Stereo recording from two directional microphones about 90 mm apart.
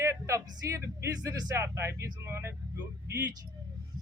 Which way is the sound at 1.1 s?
45° right (ahead or behind).